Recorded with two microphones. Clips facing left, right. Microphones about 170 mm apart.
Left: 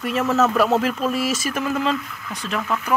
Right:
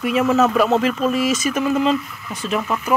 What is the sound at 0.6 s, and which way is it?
Speech, 5° left (ahead or behind).